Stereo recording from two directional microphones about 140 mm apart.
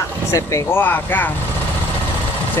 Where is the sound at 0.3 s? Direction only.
20° left (ahead or behind).